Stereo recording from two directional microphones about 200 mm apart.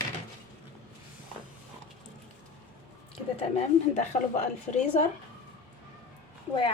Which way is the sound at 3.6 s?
35° left (ahead or behind).